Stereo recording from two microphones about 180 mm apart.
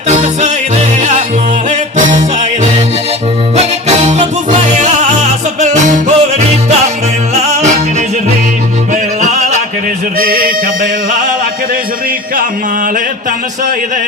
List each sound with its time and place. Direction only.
0.1 s music: 40° right (ahead or behind)
2.0 s music: 45° right (ahead or behind)
3.5 s music: 40° right (ahead or behind)
10.2 s music: 55° right (ahead or behind)